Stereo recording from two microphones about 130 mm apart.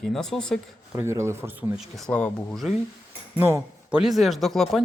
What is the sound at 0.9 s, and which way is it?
Speech, 20° right (ahead or behind).